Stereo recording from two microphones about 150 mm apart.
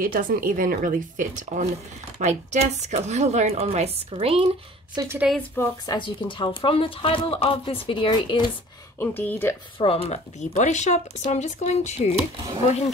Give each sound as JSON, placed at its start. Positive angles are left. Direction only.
{"t": 0.0, "sound": "speech", "side_deg": -70}
{"t": 4.9, "sound": "speech", "side_deg": -20}
{"t": 5.6, "sound": "speech", "side_deg": 15}
{"t": 5.9, "sound": "speech", "side_deg": 35}
{"t": 9.0, "sound": "speech", "side_deg": 10}
{"t": 9.8, "sound": "speech", "side_deg": 40}